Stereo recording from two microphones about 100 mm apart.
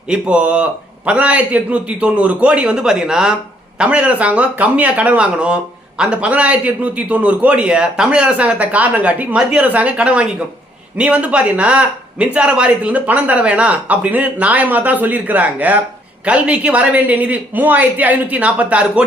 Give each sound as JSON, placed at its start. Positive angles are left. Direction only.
{"t": 0.1, "sound": "speech", "side_deg": -10}